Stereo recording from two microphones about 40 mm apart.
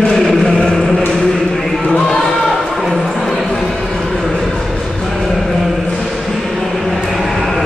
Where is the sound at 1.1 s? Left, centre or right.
Centre.